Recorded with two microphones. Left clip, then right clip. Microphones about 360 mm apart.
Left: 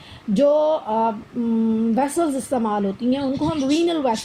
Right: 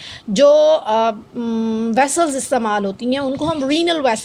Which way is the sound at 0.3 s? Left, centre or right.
Right.